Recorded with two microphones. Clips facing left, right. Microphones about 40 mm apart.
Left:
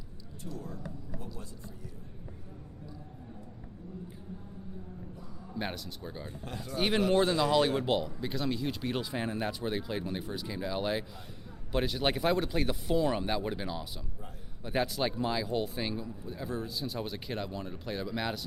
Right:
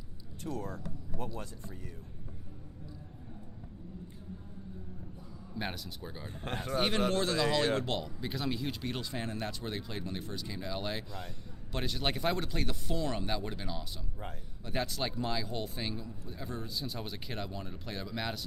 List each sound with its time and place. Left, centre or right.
0.4 s a man's voice: right
5.5 s speech: centre
6.4 s a man's voice: right
7.1 s a man's voice: left
7.8 s speech: centre